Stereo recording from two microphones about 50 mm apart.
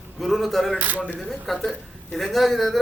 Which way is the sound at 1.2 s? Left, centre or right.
Centre.